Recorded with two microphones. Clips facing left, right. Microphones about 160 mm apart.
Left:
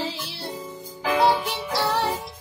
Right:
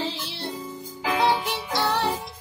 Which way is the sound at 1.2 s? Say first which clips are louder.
Left 2 dB; centre (ahead or behind).